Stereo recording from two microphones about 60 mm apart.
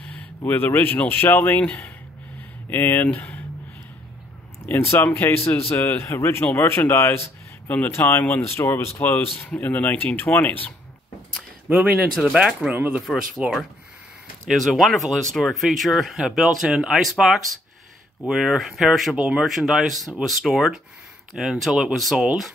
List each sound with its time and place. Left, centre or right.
0.0 s a sound: left
0.5 s a man's voice: left
4.9 s a man's voice: left
7.9 s a man's voice: left
9.6 s speech: left
11.7 s speech: right
12.2 s speech: centre
12.6 s speech: right
14.5 s speech: centre